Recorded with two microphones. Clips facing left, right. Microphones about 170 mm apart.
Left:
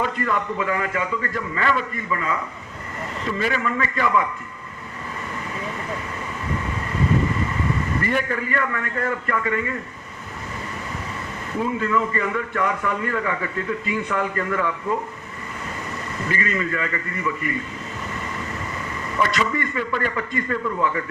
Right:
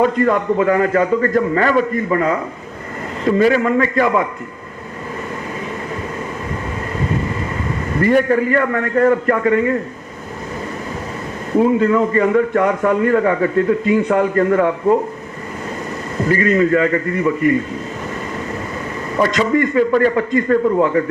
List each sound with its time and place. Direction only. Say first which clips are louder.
0.0 s a man's voice: right 9 dB; 45° right (ahead or behind)
8.0 s a man's voice: right 14 dB; 40° right (ahead or behind)
11.8 s a man's voice: right 9 dB; 40° right (ahead or behind)
16.2 s a man's voice: right 11 dB; 40° right (ahead or behind)
19.1 s a man's voice: right 8 dB; 40° right (ahead or behind)